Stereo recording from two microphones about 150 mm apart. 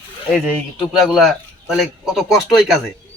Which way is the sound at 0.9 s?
Centre (ahead or behind).